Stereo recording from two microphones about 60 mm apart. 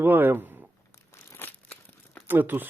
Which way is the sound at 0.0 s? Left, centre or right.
Right.